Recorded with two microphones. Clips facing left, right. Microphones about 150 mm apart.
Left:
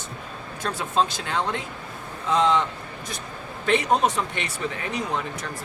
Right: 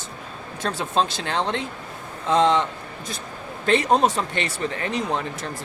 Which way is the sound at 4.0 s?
30° right (ahead or behind).